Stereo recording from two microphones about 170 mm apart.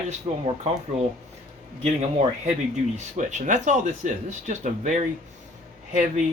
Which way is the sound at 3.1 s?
45° right (ahead or behind).